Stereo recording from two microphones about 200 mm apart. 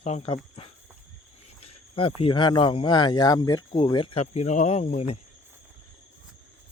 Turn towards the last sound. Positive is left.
turn(degrees=30)  # may be behind; listen again after turning